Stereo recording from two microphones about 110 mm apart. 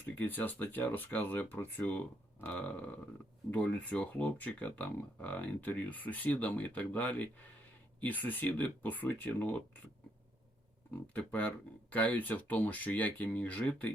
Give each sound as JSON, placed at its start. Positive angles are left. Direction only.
{"t": 0.2, "sound": "speech", "side_deg": 15}
{"t": 11.1, "sound": "speech", "side_deg": 15}